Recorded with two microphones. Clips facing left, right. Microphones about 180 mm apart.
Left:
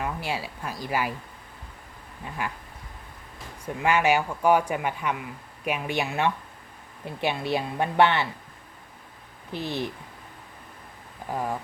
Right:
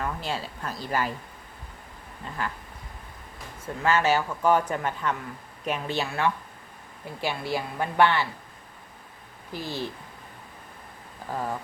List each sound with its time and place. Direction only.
0.0 s a man's voice: 10° left (ahead or behind)
2.4 s a man's voice: 10° left (ahead or behind)
3.8 s a man's voice: 15° left (ahead or behind)
9.5 s a woman's voice: 20° left (ahead or behind)
11.3 s a man's voice: 15° left (ahead or behind)